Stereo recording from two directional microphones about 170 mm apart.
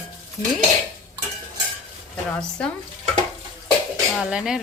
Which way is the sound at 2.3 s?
5° left (ahead or behind).